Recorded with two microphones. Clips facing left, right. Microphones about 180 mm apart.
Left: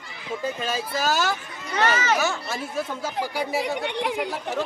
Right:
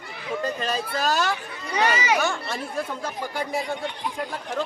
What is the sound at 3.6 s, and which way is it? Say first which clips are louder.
Speech: left 3 dB; 70° left (ahead or behind).